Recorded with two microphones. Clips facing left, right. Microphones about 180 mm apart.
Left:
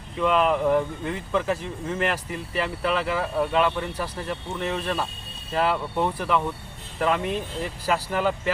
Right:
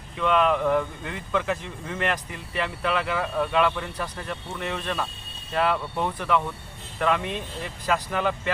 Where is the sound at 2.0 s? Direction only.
5° left (ahead or behind).